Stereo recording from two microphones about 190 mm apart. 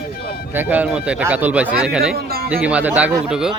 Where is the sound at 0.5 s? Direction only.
10° right (ahead or behind).